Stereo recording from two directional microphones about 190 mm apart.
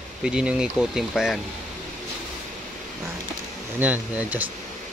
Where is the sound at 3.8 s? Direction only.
10° right (ahead or behind).